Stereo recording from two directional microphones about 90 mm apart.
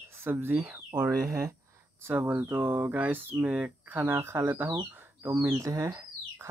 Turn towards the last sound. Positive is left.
turn(degrees=-30)  # may be behind; listen again after turning